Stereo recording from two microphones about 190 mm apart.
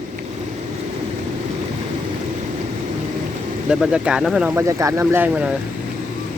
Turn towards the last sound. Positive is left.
turn(degrees=-10)  # may be behind; listen again after turning